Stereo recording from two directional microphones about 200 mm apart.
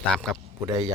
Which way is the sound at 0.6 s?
20° right (ahead or behind).